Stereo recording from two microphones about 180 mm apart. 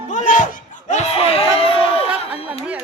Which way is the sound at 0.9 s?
40° left (ahead or behind).